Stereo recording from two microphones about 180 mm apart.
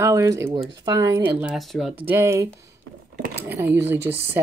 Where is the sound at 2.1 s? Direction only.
15° right (ahead or behind).